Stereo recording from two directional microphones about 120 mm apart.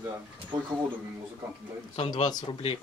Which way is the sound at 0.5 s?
40° right (ahead or behind).